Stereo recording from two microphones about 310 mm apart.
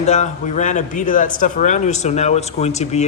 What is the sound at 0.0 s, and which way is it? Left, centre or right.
Speech, left.